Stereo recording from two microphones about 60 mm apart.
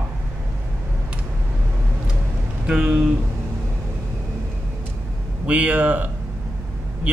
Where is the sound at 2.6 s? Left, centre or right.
Centre.